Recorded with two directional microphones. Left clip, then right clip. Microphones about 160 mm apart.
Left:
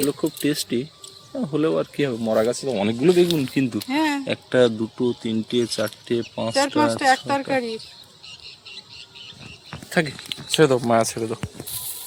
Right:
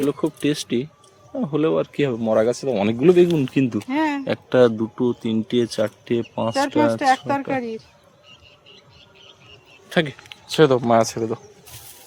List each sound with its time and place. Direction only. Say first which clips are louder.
0.0 s speech: right 1 dB; 5° right (ahead or behind)
3.3 s speech: right 2 dB; 30° right (ahead or behind)
3.8 s speech: even; centre (ahead or behind)
4.3 s speech: right 4 dB; 15° right (ahead or behind)
9.9 s speech: right 1 dB; 10° right (ahead or behind)